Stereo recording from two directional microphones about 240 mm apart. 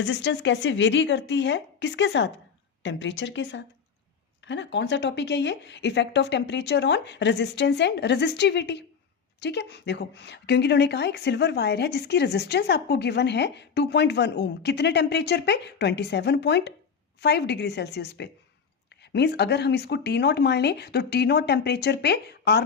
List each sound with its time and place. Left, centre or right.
0.0 s a woman's voice: left